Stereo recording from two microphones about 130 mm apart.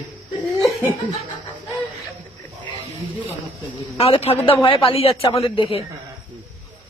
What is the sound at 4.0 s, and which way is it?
A woman's voice, 50° left (ahead or behind).